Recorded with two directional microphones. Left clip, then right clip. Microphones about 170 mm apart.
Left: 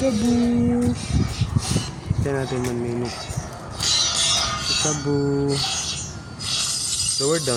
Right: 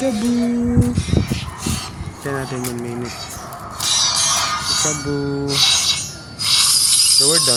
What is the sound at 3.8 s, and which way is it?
Music, 40° right (ahead or behind).